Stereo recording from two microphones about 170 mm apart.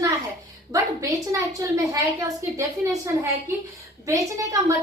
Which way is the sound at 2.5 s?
15° right (ahead or behind).